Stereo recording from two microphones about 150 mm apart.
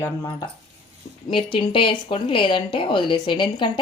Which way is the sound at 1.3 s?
35° left (ahead or behind).